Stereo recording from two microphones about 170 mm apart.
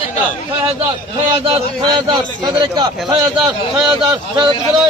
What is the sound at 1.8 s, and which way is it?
Speech, 25° right (ahead or behind).